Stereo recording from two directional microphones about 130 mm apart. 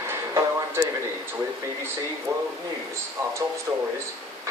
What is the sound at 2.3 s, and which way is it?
Speech, 25° right (ahead or behind).